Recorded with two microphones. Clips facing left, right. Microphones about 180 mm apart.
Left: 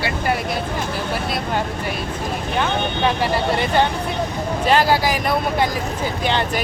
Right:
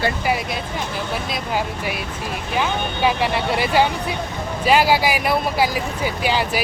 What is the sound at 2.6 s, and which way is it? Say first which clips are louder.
Speech: even; 5° right (ahead or behind).